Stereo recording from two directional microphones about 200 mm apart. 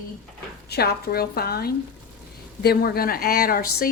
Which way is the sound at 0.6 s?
55° left (ahead or behind).